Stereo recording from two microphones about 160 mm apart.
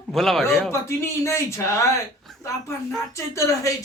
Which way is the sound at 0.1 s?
Centre (ahead or behind).